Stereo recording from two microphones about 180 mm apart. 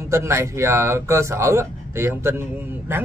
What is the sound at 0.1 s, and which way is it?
Speech, 15° right (ahead or behind).